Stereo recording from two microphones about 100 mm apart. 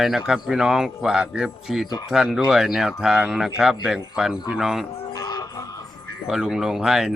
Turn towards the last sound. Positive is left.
turn(degrees=-5)  # may be behind; listen again after turning